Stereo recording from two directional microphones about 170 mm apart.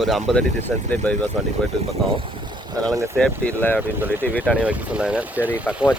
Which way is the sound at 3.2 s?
10° left (ahead or behind).